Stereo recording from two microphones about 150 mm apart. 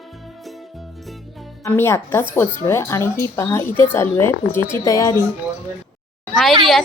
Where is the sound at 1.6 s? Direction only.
15° left (ahead or behind).